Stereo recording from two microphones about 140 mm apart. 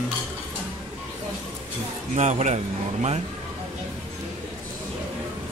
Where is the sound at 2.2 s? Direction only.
60° right (ahead or behind).